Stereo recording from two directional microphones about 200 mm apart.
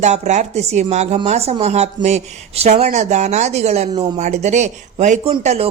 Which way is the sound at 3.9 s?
20° right (ahead or behind).